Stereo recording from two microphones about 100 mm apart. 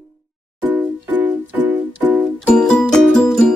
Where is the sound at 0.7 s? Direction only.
20° right (ahead or behind).